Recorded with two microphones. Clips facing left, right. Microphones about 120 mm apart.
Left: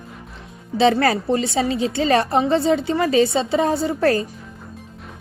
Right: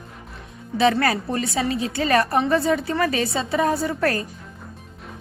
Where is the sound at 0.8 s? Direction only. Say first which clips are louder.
Left 3 dB; 30° left (ahead or behind).